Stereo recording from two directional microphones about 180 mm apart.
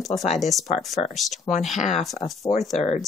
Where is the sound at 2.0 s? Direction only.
Centre (ahead or behind).